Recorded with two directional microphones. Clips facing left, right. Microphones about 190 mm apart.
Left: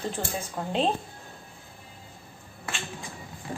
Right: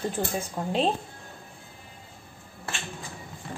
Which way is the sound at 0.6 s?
15° right (ahead or behind).